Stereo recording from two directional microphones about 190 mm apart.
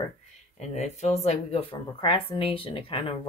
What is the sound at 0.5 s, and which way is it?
Speech, 35° left (ahead or behind).